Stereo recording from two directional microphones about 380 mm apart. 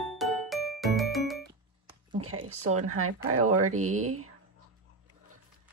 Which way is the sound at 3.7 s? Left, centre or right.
Right.